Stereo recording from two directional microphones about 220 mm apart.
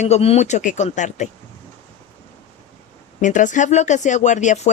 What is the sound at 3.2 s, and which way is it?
Speech, 35° left (ahead or behind).